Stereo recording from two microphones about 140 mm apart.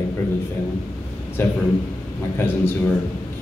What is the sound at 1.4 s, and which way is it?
A man's voice, 15° left (ahead or behind).